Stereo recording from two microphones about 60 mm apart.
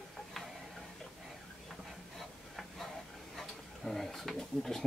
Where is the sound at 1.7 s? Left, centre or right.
Centre.